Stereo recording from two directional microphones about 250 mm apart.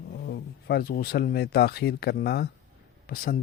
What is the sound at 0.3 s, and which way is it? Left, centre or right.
Speech, left.